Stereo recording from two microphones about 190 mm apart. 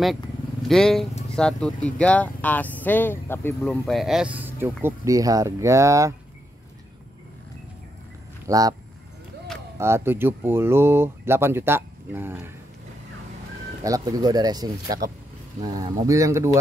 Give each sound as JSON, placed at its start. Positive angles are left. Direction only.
{"t": 0.0, "sound": "speech", "side_deg": 0}
{"t": 8.5, "sound": "speech", "side_deg": -20}
{"t": 9.8, "sound": "speech", "side_deg": -15}
{"t": 13.8, "sound": "speech", "side_deg": -20}